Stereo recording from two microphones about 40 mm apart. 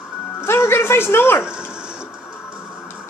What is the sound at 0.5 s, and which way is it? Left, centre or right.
Speech, left.